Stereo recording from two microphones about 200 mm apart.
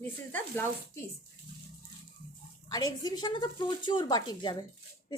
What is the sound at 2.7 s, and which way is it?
A woman's voice, 20° left (ahead or behind).